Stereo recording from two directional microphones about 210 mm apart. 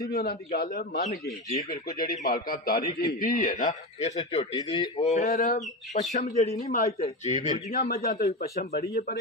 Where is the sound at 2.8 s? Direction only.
20° left (ahead or behind).